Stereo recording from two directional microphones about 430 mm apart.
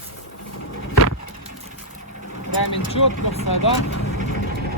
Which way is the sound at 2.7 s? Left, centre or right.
Left.